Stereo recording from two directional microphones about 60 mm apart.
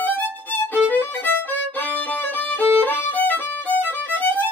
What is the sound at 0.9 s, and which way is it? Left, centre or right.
Violin, left.